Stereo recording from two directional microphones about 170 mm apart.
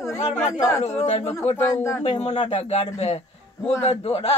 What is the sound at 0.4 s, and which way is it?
Speech, 20° left (ahead or behind).